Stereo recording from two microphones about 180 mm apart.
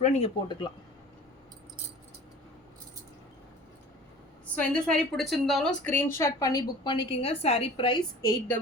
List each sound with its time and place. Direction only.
0.0 s speech: 35° left (ahead or behind)
4.5 s a woman's voice: 5° left (ahead or behind)